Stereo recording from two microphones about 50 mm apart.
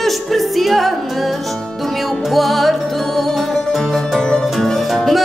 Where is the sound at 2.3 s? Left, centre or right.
Centre.